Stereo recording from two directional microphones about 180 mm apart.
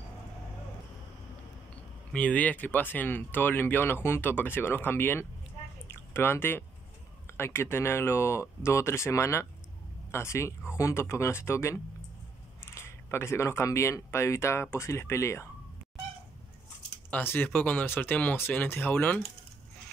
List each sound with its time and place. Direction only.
2.1 s speech: 10° left (ahead or behind)
5.9 s a sound: 15° left (ahead or behind)
7.2 s speech: 15° left (ahead or behind)
17.1 s speech: 10° left (ahead or behind)